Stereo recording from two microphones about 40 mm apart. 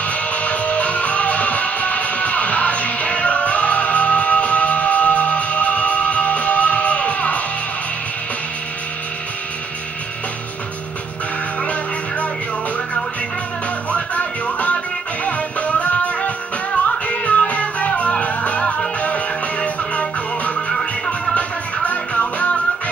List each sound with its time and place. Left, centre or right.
0.1 s music: left
13.9 s music: left
21.8 s music: left